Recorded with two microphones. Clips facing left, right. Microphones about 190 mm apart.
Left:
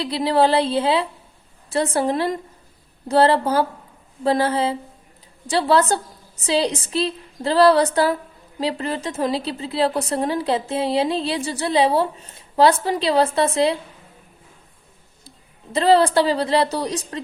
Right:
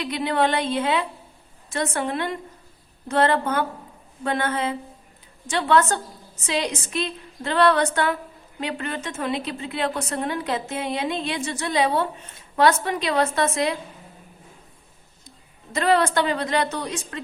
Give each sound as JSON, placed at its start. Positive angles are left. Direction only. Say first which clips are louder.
{"t": 0.0, "sound": "a woman's voice", "louder": "left 4 dB", "side_deg": 35}
{"t": 15.7, "sound": "a woman's voice", "louder": "left 5 dB", "side_deg": 30}